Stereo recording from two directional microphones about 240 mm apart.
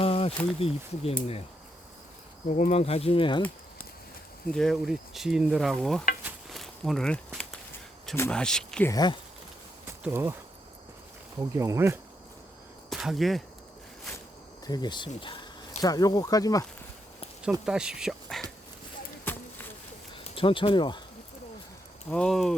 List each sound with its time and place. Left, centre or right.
0.0 s speech: left
2.5 s speech: left
4.4 s sizzle: centre
6.2 s walk: centre
8.0 s sizzle: centre
8.9 s speech: centre
10.0 s speech: centre
11.3 s speech: centre
12.9 s speech: centre
14.7 s speech: centre
17.7 s speech: centre
19.2 s a sound: centre
20.1 s speech: left
22.1 s sizzle: centre